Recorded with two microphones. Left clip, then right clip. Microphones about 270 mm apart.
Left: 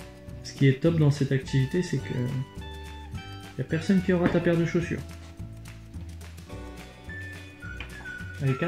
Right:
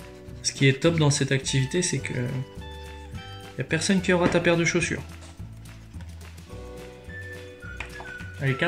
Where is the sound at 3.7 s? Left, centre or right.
Right.